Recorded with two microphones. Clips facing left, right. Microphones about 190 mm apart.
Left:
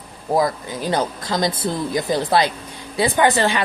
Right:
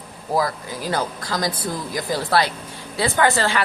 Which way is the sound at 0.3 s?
20° left (ahead or behind).